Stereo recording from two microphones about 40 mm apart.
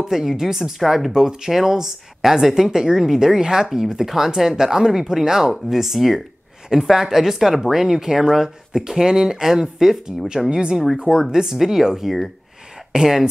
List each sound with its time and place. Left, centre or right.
0.0 s speech: centre
11.1 s speech: centre